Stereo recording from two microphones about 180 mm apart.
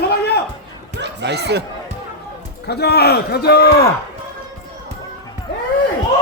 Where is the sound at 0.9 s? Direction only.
75° right (ahead or behind).